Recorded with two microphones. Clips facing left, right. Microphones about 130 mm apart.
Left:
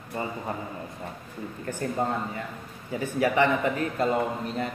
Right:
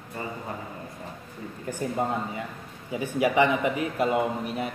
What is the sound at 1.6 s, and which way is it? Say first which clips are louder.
A man's voice: even; 15° right (ahead or behind).